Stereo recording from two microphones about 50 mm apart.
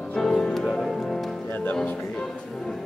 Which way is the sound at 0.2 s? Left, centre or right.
Centre.